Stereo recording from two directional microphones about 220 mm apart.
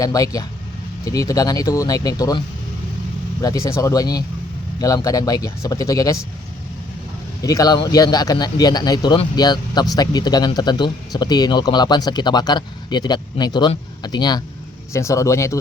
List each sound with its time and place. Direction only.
0.0 s speech: 15° left (ahead or behind)
3.4 s speech: 15° left (ahead or behind)
7.4 s speech: 15° left (ahead or behind)